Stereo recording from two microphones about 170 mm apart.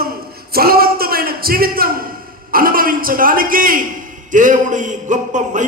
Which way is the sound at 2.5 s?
60° right (ahead or behind).